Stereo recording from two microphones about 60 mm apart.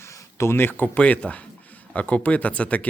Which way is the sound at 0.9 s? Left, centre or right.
Left.